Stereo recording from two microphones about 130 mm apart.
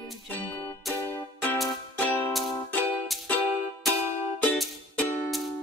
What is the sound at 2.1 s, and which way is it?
Music, 20° left (ahead or behind).